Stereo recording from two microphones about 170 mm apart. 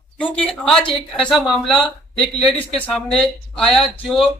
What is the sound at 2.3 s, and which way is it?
Speech, 35° left (ahead or behind).